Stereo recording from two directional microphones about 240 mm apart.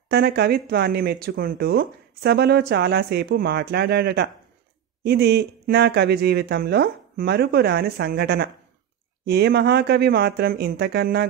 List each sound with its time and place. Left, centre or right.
0.1 s speech: right